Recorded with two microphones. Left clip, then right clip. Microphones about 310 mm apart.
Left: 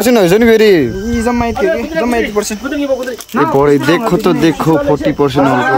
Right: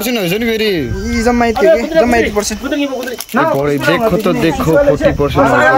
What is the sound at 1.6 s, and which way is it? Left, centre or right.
Speech, right.